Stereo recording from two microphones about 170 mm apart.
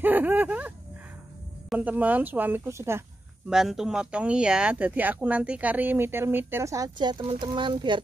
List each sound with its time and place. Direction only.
0.0 s speech: 10° right (ahead or behind)
3.4 s speech: 5° right (ahead or behind); by 8.0 s 30° right (ahead or behind)